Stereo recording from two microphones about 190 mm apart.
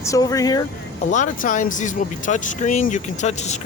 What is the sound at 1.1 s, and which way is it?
Speech, 40° left (ahead or behind).